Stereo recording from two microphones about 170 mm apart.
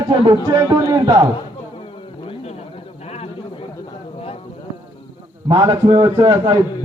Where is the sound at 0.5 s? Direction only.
20° right (ahead or behind).